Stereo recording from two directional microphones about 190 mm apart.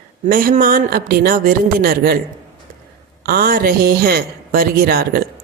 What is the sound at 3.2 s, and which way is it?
Speech, 50° right (ahead or behind).